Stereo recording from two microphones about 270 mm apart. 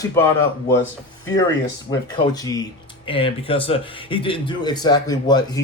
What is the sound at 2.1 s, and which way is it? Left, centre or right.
Speech, centre.